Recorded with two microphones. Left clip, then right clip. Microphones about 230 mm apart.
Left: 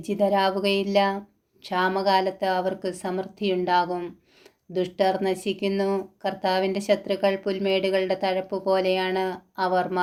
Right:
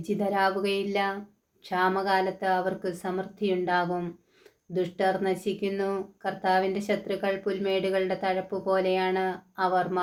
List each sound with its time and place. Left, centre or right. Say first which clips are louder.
0.0 s speech: left 4 dB; left